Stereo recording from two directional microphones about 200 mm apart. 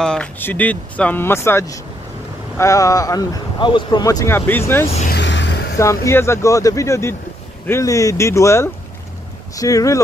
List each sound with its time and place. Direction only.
0.0 s speech: 5° left (ahead or behind)
4.8 s speech: 35° left (ahead or behind)
5.1 s a sound: 65° left (ahead or behind)
6.0 s speech: 15° left (ahead or behind)